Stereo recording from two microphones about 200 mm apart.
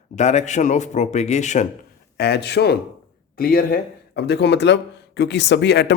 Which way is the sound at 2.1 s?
55° left (ahead or behind).